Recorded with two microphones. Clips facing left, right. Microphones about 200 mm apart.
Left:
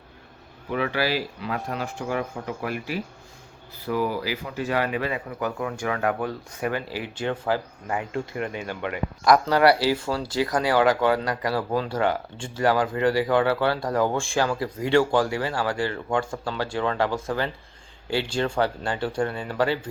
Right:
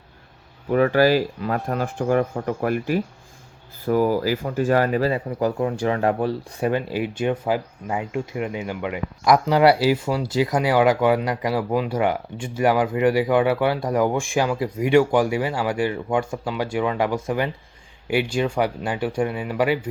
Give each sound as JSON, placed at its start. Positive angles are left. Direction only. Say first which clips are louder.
{"t": 0.7, "sound": "speech", "louder": "right 8 dB", "side_deg": -45}